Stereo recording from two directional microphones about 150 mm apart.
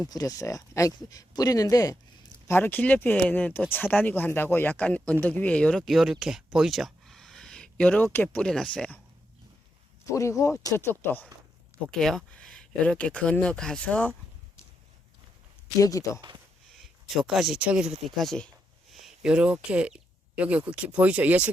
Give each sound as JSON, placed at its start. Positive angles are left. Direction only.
{"t": 0.1, "sound": "speech", "side_deg": 25}
{"t": 2.5, "sound": "speech", "side_deg": 15}
{"t": 10.1, "sound": "speech", "side_deg": 20}
{"t": 11.9, "sound": "speech", "side_deg": 5}
{"t": 15.8, "sound": "speech", "side_deg": 20}
{"t": 16.8, "sound": "speech", "side_deg": 0}
{"t": 18.2, "sound": "speech", "side_deg": 5}
{"t": 18.9, "sound": "a sound", "side_deg": -5}
{"t": 19.6, "sound": "speech", "side_deg": -10}